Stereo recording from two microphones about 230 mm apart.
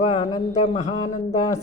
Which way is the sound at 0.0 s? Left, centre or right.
Left.